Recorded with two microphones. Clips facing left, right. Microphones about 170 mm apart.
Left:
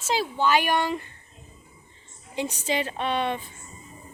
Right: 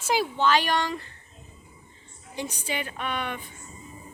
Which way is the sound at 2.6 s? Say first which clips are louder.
Left 6 dB; 30° left (ahead or behind).